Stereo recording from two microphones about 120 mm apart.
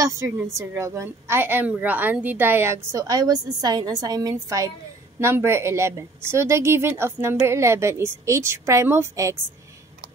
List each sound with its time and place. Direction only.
0.0 s a woman's voice: 25° right (ahead or behind)